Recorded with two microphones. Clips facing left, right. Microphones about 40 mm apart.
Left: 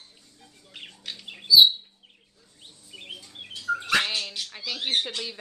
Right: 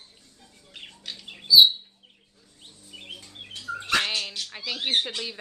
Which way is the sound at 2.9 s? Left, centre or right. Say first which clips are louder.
Left 1 dB; centre.